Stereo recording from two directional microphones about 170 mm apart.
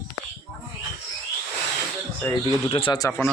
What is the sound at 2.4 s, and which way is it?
Speech, 30° left (ahead or behind).